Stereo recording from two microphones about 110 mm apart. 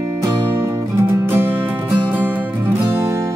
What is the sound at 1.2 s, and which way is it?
Music, 20° right (ahead or behind).